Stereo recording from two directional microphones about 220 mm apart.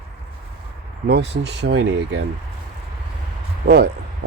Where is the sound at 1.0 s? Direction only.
50° right (ahead or behind).